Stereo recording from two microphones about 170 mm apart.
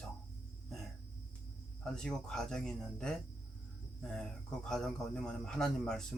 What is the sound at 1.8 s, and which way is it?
A man's voice, 5° left (ahead or behind).